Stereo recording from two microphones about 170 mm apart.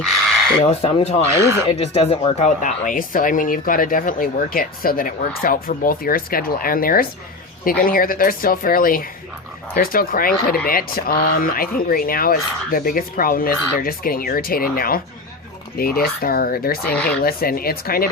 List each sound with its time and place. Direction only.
0.6 s speech: 35° left (ahead or behind)
1.4 s speech: 15° right (ahead or behind)
1.6 s speech: 35° left (ahead or behind); by 16.9 s 60° left (ahead or behind)
16.9 s speech: 5° left (ahead or behind)
17.2 s speech: 60° left (ahead or behind)